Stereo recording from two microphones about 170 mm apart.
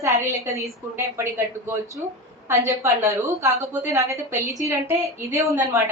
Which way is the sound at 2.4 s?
15° right (ahead or behind).